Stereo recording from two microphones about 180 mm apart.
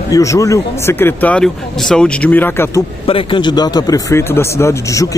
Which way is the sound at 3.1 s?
30° left (ahead or behind).